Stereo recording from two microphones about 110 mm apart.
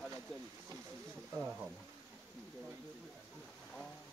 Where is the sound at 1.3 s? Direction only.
10° right (ahead or behind).